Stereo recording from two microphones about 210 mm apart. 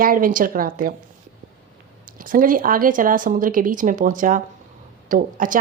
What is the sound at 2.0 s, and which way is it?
A woman's voice, 40° right (ahead or behind).